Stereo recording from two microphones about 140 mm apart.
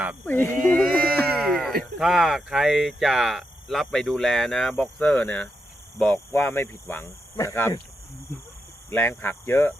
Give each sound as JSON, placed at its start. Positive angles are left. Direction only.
{"t": 0.3, "sound": "speech", "side_deg": 15}
{"t": 1.2, "sound": "a sound", "side_deg": 5}
{"t": 2.0, "sound": "speech", "side_deg": -5}
{"t": 8.9, "sound": "speech", "side_deg": 15}